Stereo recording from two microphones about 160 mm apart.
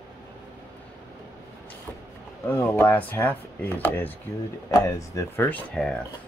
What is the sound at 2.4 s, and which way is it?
Speech, 10° left (ahead or behind).